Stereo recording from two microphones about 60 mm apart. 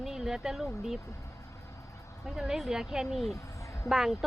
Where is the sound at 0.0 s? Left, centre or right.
Centre.